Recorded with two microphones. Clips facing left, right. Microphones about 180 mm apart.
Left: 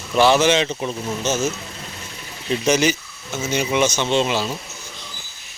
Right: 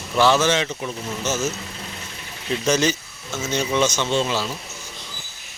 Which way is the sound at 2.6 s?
10° left (ahead or behind).